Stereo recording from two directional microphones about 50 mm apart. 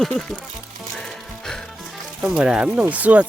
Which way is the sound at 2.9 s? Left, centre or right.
Right.